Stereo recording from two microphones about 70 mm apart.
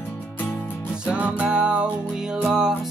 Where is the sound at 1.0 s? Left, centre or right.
Centre.